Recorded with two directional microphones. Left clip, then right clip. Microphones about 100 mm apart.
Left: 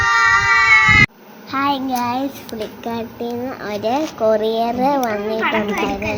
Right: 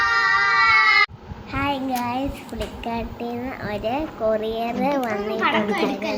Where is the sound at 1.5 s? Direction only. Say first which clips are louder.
Left 5 dB; 40° left (ahead or behind).